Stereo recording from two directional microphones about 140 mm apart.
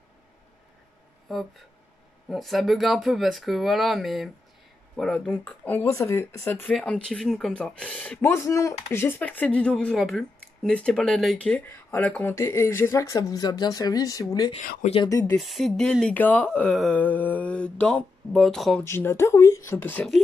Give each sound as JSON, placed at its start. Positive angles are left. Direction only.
{"t": 1.3, "sound": "speech", "side_deg": 0}
{"t": 6.7, "sound": "speech", "side_deg": 5}
{"t": 14.6, "sound": "speech", "side_deg": 70}
{"t": 15.0, "sound": "speech", "side_deg": 25}
{"t": 15.3, "sound": "speech", "side_deg": 0}
{"t": 18.9, "sound": "speech", "side_deg": 15}